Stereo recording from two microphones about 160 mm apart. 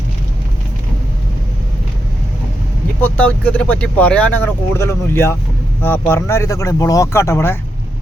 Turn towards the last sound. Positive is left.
turn(degrees=15)  # may be behind; listen again after turning